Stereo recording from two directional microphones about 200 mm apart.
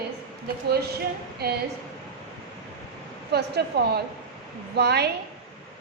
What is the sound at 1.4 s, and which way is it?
Speech, 55° right (ahead or behind).